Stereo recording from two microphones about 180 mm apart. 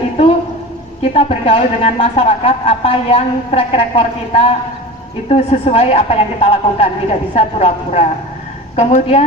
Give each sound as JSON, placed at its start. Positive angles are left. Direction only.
{"t": 1.1, "sound": "speech", "side_deg": 35}